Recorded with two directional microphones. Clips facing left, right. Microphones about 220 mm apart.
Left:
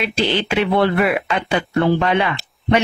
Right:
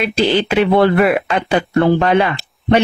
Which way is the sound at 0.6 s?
45° right (ahead or behind).